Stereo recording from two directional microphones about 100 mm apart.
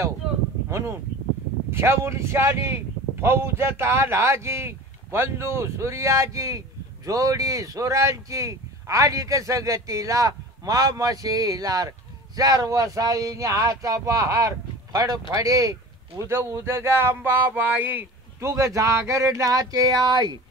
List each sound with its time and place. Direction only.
0.7 s speech: 25° right (ahead or behind)
16.2 s speech: 25° right (ahead or behind); by 20.3 s 45° right (ahead or behind)